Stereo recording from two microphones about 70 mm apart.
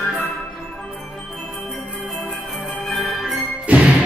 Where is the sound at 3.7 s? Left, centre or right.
Centre.